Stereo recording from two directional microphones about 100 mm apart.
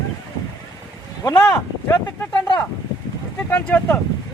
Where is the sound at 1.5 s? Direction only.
30° left (ahead or behind).